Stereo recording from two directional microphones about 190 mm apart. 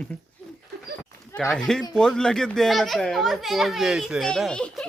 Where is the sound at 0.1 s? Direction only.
10° left (ahead or behind).